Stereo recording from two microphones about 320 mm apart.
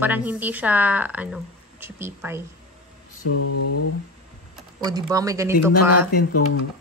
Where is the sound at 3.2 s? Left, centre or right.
Left.